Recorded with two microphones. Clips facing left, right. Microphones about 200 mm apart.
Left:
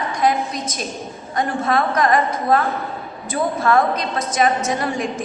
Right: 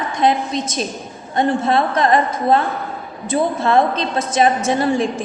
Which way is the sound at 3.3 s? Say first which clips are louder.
Right 2 dB; 25° right (ahead or behind).